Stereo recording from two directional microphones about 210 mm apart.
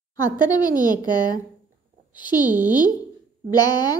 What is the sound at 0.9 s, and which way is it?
Speech, 20° left (ahead or behind).